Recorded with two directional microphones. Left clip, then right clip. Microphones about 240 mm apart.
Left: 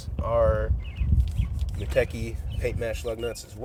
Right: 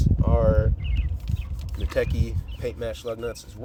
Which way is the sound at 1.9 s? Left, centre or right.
Centre.